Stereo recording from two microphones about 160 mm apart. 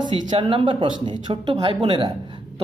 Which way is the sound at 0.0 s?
35° right (ahead or behind).